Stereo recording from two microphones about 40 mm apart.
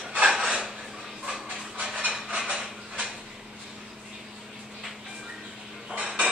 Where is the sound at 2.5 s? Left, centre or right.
Centre.